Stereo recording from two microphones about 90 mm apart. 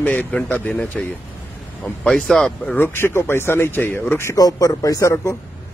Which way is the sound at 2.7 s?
25° left (ahead or behind).